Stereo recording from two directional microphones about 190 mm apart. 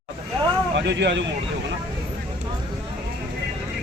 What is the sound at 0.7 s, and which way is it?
Speech, 65° right (ahead or behind).